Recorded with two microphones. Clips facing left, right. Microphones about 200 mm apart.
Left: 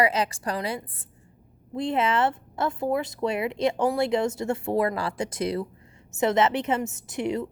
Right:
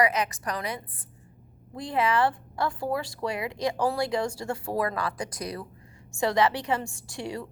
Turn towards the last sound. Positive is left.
turn(degrees=20)  # may be behind; listen again after turning